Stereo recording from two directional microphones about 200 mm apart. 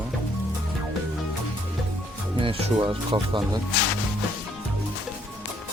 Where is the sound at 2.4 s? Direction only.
25° right (ahead or behind).